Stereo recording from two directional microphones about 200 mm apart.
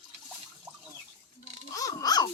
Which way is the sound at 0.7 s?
10° right (ahead or behind).